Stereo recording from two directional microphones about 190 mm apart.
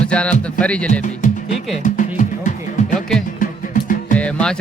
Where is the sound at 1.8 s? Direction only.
45° left (ahead or behind).